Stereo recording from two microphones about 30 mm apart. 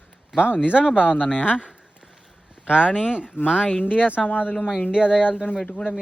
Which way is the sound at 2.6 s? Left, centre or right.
Right.